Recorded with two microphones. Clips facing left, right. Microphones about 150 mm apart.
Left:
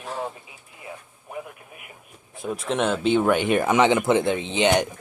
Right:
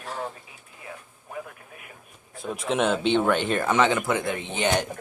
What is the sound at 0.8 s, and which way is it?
Radio, 20° left (ahead or behind).